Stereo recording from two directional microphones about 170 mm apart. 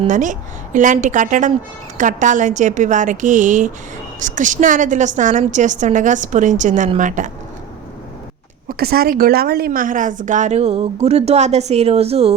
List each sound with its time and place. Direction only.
0.1 s a woman's voice: 45° right (ahead or behind)
8.8 s a woman's voice: 65° right (ahead or behind); by 12.3 s 35° right (ahead or behind)